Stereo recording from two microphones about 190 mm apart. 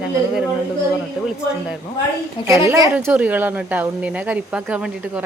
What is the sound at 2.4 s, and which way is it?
Speech, 25° left (ahead or behind).